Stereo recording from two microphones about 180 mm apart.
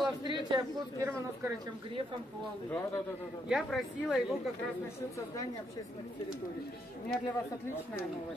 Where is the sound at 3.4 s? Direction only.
Centre (ahead or behind).